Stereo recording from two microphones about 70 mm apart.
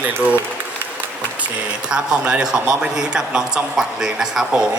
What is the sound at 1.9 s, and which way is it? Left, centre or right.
A man's voice, centre.